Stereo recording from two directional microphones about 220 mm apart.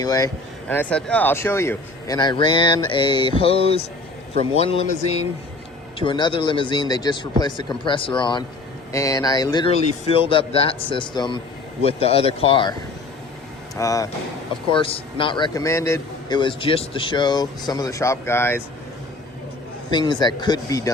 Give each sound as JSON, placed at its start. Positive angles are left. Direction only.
{"t": 0.0, "sound": "a man's voice", "side_deg": 15}
{"t": 13.7, "sound": "a man's voice", "side_deg": 15}
{"t": 19.9, "sound": "a man's voice", "side_deg": 20}